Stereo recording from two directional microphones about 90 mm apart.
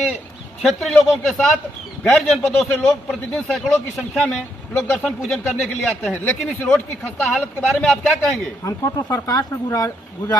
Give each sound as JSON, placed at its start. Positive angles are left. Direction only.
{"t": 0.7, "sound": "speech", "side_deg": 0}
{"t": 8.6, "sound": "speech", "side_deg": 40}